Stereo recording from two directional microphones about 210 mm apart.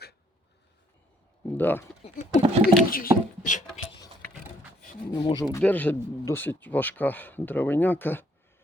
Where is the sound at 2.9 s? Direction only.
40° left (ahead or behind).